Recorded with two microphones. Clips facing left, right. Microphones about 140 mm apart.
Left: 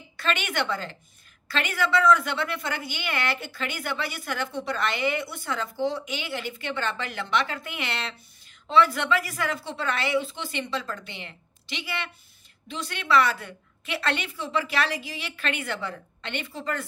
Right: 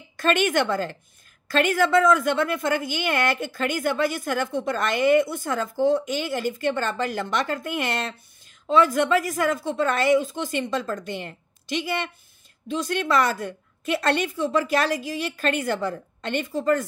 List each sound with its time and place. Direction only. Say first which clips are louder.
0.2 s a woman's voice: right 7 dB; 45° right (ahead or behind)